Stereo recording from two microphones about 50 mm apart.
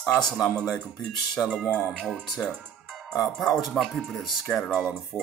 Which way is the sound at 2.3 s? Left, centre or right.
Centre.